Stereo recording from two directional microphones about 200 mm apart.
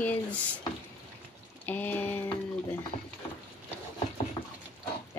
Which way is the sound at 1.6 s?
10° left (ahead or behind).